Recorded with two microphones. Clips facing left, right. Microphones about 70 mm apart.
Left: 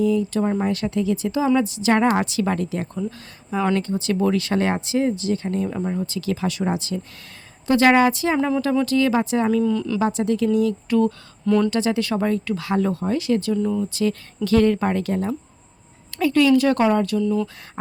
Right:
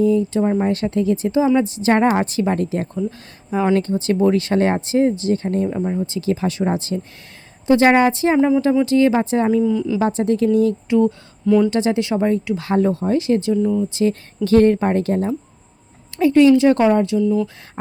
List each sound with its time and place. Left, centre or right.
0.0 s speech: right
3.1 s speech: right
5.6 s speech: centre
6.1 s speech: right
9.6 s speech: centre
10.0 s speech: right
10.8 s speech: right
11.4 s speech: centre
11.7 s speech: right
13.6 s speech: centre
13.9 s speech: right
17.2 s speech: centre